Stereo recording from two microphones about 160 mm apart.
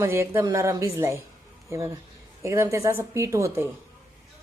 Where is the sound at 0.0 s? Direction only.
15° right (ahead or behind).